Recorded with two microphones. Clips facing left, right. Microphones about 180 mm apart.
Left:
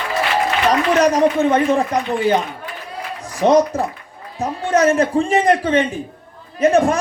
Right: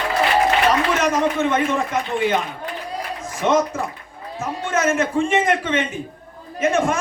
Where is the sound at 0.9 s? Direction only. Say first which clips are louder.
Left 5 dB; 35° left (ahead or behind).